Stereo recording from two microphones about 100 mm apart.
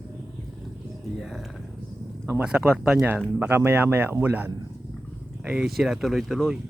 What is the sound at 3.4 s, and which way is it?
Speech, 20° right (ahead or behind).